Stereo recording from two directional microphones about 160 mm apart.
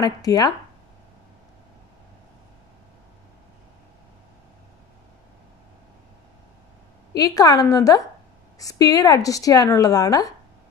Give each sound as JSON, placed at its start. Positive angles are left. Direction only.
{"t": 0.0, "sound": "speech", "side_deg": 25}
{"t": 7.2, "sound": "speech", "side_deg": 25}